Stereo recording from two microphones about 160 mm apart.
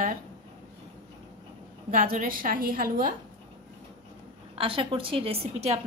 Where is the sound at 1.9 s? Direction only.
60° right (ahead or behind).